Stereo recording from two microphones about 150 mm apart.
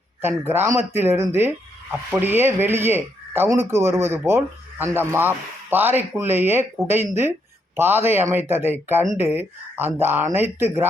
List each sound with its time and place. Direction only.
0.2 s speech: 15° right (ahead or behind)